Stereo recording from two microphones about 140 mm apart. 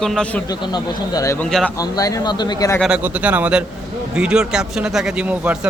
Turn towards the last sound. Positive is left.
turn(degrees=-10)  # may be behind; listen again after turning